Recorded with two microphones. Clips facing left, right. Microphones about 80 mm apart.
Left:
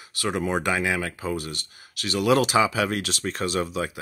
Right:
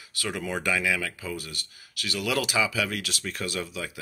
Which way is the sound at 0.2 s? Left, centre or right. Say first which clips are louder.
Left 5 dB; left.